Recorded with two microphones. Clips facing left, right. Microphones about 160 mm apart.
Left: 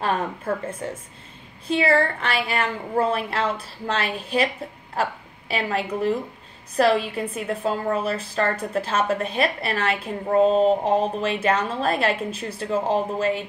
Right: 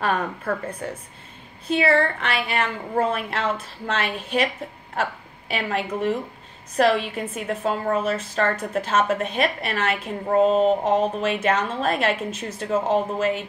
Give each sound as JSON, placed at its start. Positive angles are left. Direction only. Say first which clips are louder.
{"t": 0.0, "sound": "a woman's voice", "louder": "even", "side_deg": 25}
{"t": 5.5, "sound": "a woman's voice", "louder": "left 1 dB", "side_deg": 35}